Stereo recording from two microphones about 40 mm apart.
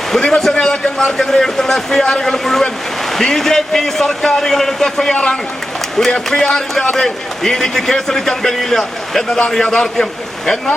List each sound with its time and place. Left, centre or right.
0.1 s a man's voice: centre